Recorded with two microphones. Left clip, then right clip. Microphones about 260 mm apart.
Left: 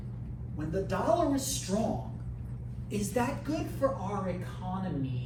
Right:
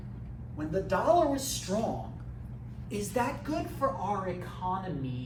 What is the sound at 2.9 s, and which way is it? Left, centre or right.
A woman's voice, centre.